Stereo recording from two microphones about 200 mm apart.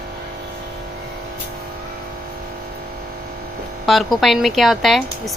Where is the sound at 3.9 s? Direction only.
Centre (ahead or behind).